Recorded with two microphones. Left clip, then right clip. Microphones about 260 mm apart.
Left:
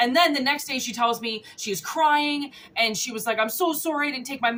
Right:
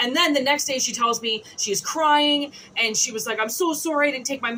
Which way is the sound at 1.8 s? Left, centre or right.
Left.